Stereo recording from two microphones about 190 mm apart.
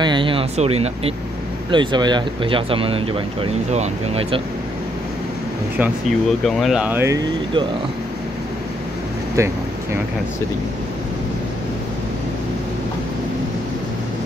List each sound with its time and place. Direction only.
0.0 s speech: 25° right (ahead or behind)
5.8 s speech: centre (ahead or behind); by 7.6 s 20° right (ahead or behind)
9.4 s speech: 15° right (ahead or behind)